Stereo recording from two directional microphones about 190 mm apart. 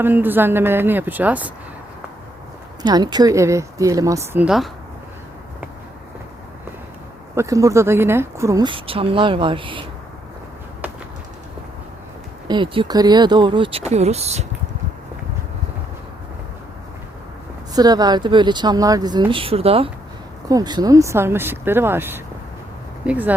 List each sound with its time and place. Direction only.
0.0 s speech: 10° right (ahead or behind)
2.8 s speech: 20° right (ahead or behind); by 4.7 s centre (ahead or behind)
7.3 s a woman's voice: 15° right (ahead or behind)
12.5 s a woman's voice: 25° right (ahead or behind)
17.7 s a woman's voice: 20° right (ahead or behind)
20.5 s speech: 20° right (ahead or behind)